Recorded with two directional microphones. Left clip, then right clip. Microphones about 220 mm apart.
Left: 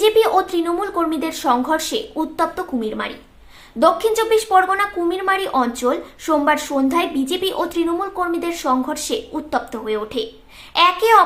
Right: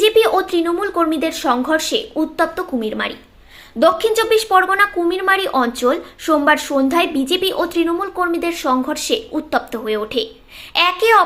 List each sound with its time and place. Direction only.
0.0 s speech: 5° right (ahead or behind)